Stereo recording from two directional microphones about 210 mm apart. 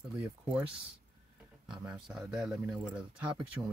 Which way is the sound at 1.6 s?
Centre (ahead or behind).